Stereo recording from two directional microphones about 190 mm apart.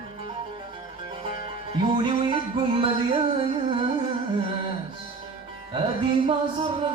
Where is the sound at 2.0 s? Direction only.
25° right (ahead or behind).